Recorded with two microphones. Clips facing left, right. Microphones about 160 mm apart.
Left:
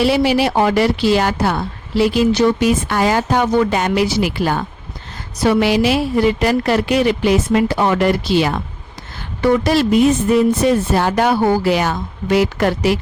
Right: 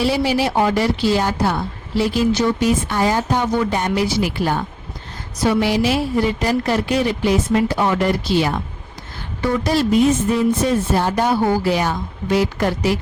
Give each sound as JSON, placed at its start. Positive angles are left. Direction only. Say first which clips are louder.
{"t": 0.0, "sound": "a woman's voice", "louder": "left 4 dB", "side_deg": 70}
{"t": 9.4, "sound": "a woman's voice", "louder": "left 4 dB", "side_deg": 70}